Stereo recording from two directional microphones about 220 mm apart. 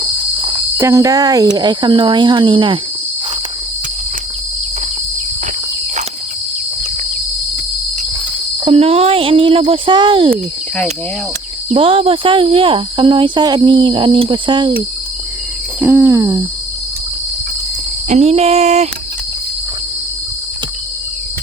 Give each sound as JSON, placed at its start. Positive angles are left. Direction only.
{"t": 0.0, "sound": "cricket", "side_deg": -25}
{"t": 0.8, "sound": "speech", "side_deg": -15}
{"t": 8.6, "sound": "speech", "side_deg": -25}
{"t": 11.7, "sound": "speech", "side_deg": -25}
{"t": 15.8, "sound": "cricket", "side_deg": -10}
{"t": 18.1, "sound": "speech", "side_deg": -30}